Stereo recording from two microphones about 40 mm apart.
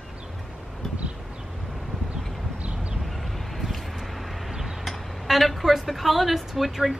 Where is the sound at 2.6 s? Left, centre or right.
Right.